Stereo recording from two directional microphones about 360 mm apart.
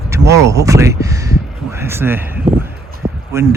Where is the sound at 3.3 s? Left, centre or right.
Centre.